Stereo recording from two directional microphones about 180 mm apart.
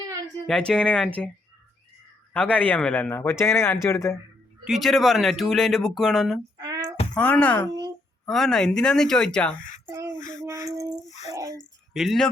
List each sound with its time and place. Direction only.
0.7 s speech: 5° left (ahead or behind)
2.3 s a man's voice: 10° left (ahead or behind)
4.6 s speech: centre (ahead or behind)
6.6 s a sound: 20° right (ahead or behind)
7.2 s a man's voice: 10° left (ahead or behind)
9.8 s a sound: 15° right (ahead or behind)
11.9 s speech: centre (ahead or behind)